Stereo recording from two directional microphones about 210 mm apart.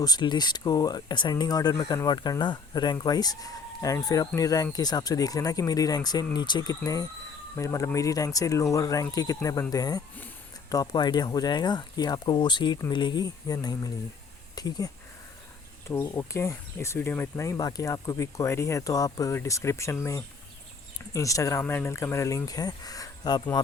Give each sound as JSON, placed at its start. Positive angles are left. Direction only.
{"t": 0.0, "sound": "speech", "side_deg": 20}
{"t": 15.9, "sound": "speech", "side_deg": 10}